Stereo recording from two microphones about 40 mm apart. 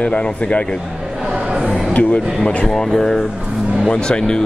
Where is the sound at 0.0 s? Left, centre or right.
Left.